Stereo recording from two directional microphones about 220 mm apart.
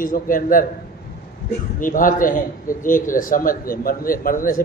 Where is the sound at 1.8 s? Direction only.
40° left (ahead or behind).